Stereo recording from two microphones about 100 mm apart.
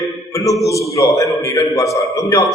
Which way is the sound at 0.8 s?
35° left (ahead or behind).